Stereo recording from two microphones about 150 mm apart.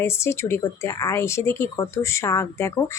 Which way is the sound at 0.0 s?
20° left (ahead or behind).